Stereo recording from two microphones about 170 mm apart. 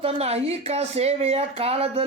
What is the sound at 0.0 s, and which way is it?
Speech, 35° right (ahead or behind).